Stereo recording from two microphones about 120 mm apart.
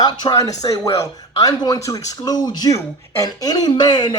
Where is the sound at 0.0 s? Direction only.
35° left (ahead or behind).